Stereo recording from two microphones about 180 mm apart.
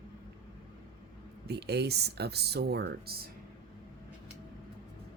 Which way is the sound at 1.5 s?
65° right (ahead or behind).